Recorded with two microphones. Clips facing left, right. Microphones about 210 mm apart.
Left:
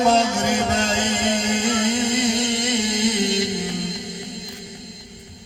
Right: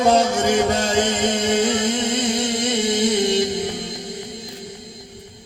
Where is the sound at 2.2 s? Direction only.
40° right (ahead or behind).